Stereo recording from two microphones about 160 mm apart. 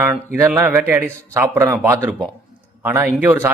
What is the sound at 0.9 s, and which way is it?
A man's voice, 20° right (ahead or behind).